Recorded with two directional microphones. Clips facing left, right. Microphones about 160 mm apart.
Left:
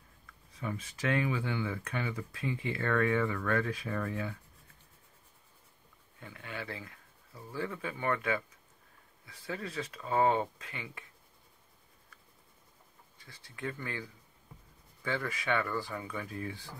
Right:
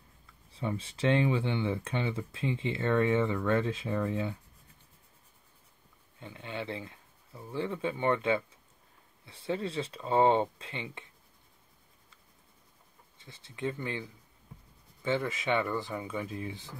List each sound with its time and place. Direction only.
0.5 s speech: 30° right (ahead or behind)
6.1 s speech: 20° right (ahead or behind)
13.2 s speech: 20° right (ahead or behind)